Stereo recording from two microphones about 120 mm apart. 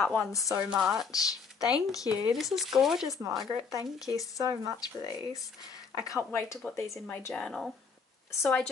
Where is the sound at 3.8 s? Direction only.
30° left (ahead or behind).